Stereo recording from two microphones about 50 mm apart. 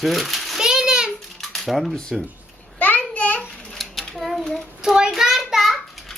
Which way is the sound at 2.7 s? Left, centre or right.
Left.